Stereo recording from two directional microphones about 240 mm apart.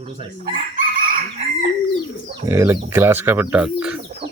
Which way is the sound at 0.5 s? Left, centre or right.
Right.